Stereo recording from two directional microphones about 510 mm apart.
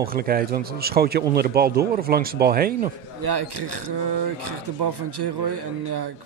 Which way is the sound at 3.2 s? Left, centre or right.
Right.